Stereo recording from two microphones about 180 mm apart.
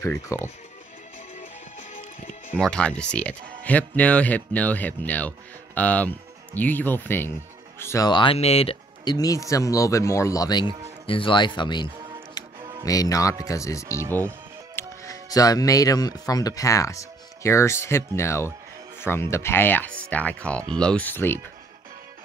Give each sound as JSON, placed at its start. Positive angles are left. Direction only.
{"t": 0.0, "sound": "speech", "side_deg": 15}
{"t": 1.4, "sound": "music", "side_deg": 40}
{"t": 2.5, "sound": "speech", "side_deg": 5}
{"t": 12.4, "sound": "music", "side_deg": 20}
{"t": 12.8, "sound": "speech", "side_deg": 20}